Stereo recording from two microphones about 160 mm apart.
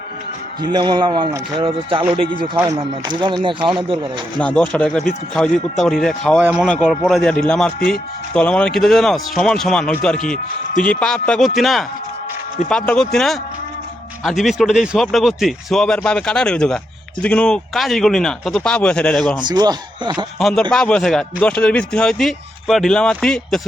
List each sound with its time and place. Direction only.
0.6 s speech: 25° right (ahead or behind)
4.4 s speech: 5° left (ahead or behind)
6.4 s speech: 10° right (ahead or behind)
19.4 s speech: 25° right (ahead or behind)
20.1 s speech: centre (ahead or behind)